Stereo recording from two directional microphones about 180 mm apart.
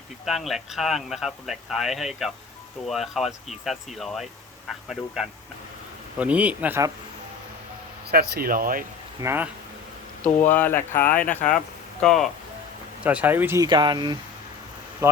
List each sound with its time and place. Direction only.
0.3 s speech: centre (ahead or behind)
8.1 s speech: 60° right (ahead or behind)
9.2 s speech: 10° right (ahead or behind)
10.4 s speech: 10° left (ahead or behind); by 13.7 s 10° right (ahead or behind)
13.7 s speech: 25° right (ahead or behind)